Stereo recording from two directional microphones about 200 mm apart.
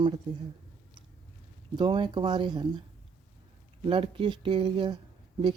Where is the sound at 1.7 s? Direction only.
25° right (ahead or behind).